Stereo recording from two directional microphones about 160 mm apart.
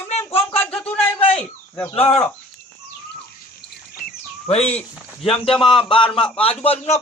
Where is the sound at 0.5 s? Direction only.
10° left (ahead or behind).